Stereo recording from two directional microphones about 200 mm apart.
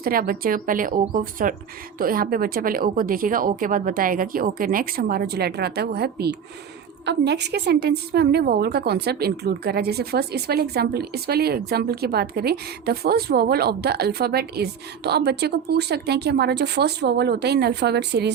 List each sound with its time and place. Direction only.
0.0 s a woman's voice: 45° right (ahead or behind)